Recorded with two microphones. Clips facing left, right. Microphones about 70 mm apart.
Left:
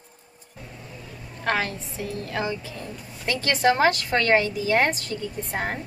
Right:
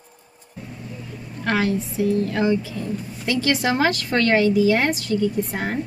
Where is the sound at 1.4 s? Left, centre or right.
Left.